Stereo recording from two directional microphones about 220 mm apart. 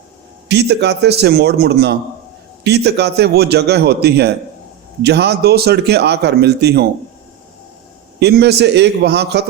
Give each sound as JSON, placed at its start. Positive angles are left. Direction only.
{"t": 0.4, "sound": "speech", "side_deg": -50}
{"t": 8.2, "sound": "speech", "side_deg": -50}